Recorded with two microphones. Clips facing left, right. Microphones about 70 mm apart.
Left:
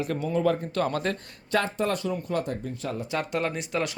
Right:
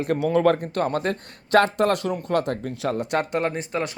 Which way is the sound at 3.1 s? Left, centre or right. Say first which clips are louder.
Right 2 dB; right.